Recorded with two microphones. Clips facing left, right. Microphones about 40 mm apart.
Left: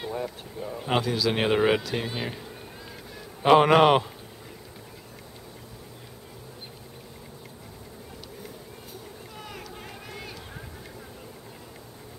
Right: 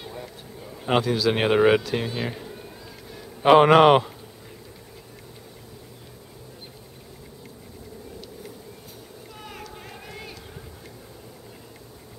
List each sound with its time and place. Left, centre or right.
0.0 s speech: centre
0.8 s speech: centre
3.4 s a man's voice: centre
9.4 s a sound: centre